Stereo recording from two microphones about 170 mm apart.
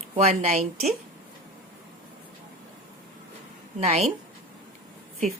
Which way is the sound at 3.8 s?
40° right (ahead or behind).